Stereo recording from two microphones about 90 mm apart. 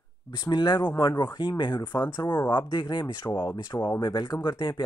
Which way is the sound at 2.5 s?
65° left (ahead or behind).